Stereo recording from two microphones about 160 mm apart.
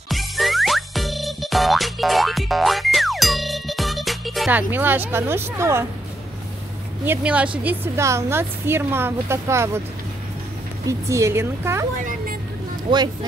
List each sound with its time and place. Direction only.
0.1 s music: centre (ahead or behind)
4.5 s a woman's voice: 10° right (ahead or behind)
7.1 s a woman's voice: 10° right (ahead or behind)
10.9 s a woman's voice: 20° right (ahead or behind)
12.0 s vehicle: 55° right (ahead or behind)